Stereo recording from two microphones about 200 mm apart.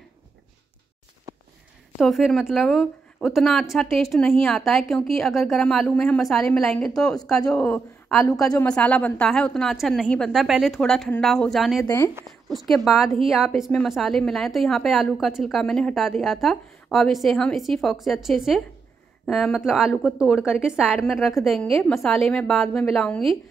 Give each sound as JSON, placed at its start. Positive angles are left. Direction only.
{"t": 1.3, "sound": "a sound", "side_deg": -15}
{"t": 2.0, "sound": "a woman's voice", "side_deg": 0}
{"t": 11.8, "sound": "speech", "side_deg": 15}
{"t": 12.3, "sound": "a woman's voice", "side_deg": 0}